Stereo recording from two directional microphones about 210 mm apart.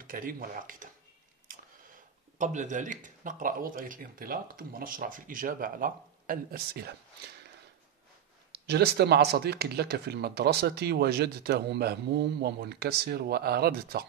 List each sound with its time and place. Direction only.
0.0 s speech: 45° right (ahead or behind)
2.3 s speech: 35° right (ahead or behind)
8.5 s speech: 50° right (ahead or behind)